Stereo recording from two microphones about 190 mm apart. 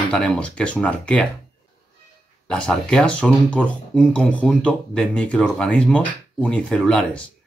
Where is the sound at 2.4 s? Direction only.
5° left (ahead or behind).